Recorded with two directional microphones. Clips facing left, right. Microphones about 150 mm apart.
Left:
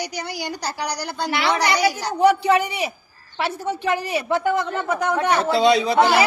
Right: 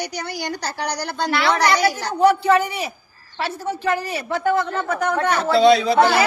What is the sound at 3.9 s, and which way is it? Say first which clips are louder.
A man's voice: left 1 dB; 15° left (ahead or behind).